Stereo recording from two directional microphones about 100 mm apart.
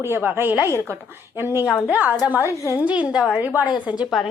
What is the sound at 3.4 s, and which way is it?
Speech, 20° right (ahead or behind).